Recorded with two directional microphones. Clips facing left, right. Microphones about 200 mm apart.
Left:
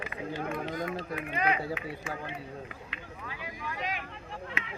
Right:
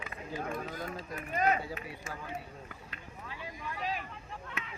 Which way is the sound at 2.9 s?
90° left.